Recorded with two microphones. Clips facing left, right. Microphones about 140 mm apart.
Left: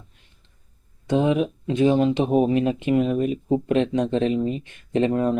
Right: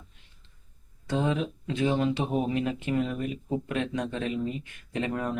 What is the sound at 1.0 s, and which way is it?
Speech, 20° left (ahead or behind).